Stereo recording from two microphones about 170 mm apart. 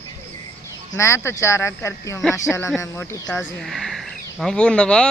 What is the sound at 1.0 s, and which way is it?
Speech, 15° left (ahead or behind).